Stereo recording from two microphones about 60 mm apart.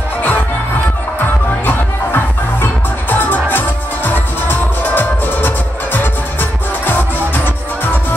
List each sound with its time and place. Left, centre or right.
1.7 s music: left